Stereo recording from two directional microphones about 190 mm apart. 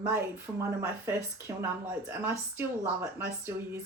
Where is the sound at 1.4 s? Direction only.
10° right (ahead or behind).